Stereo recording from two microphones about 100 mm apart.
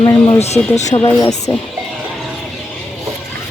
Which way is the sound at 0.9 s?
60° left (ahead or behind).